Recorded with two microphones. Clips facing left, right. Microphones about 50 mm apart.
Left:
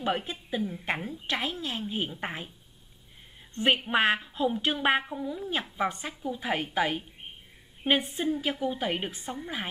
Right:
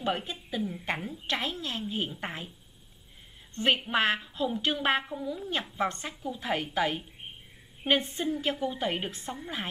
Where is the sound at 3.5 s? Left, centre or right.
Centre.